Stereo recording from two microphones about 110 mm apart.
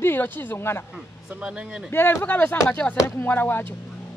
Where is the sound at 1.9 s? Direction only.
20° left (ahead or behind).